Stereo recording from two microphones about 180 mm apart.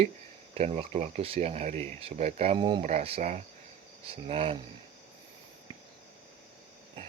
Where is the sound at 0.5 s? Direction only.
35° right (ahead or behind).